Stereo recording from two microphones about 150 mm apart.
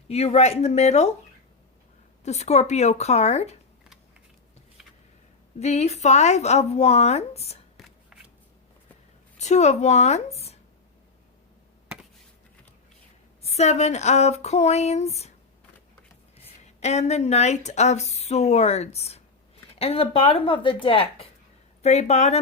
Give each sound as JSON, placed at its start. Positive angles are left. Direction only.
{"t": 0.1, "sound": "speech", "side_deg": 45}
{"t": 2.2, "sound": "speech", "side_deg": 45}
{"t": 5.5, "sound": "speech", "side_deg": 45}
{"t": 7.8, "sound": "shuffling cards", "side_deg": 0}
{"t": 9.4, "sound": "speech", "side_deg": 50}
{"t": 13.4, "sound": "speech", "side_deg": 45}
{"t": 16.6, "sound": "a woman's voice", "side_deg": 50}